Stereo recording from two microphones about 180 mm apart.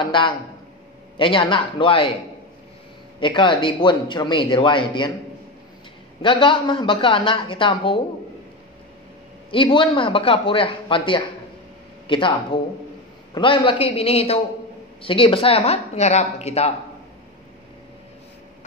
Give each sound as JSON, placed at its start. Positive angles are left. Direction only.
{"t": 0.0, "sound": "speech", "side_deg": 25}
{"t": 3.2, "sound": "speech", "side_deg": 25}
{"t": 6.2, "sound": "speech", "side_deg": 30}
{"t": 9.5, "sound": "speech", "side_deg": 30}